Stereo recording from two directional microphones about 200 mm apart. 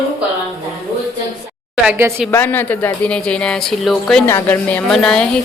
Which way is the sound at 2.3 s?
10° left (ahead or behind).